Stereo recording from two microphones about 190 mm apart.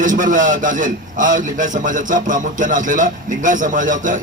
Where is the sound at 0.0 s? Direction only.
45° right (ahead or behind).